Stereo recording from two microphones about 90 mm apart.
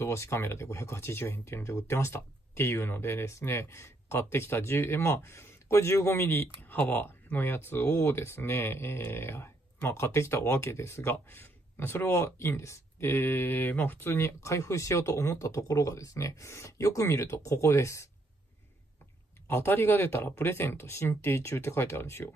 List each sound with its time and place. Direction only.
0.0 s speech: 30° left (ahead or behind)
19.4 s speech: 30° left (ahead or behind)